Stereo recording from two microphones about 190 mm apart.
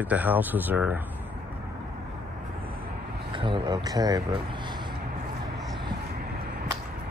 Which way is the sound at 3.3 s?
25° right (ahead or behind).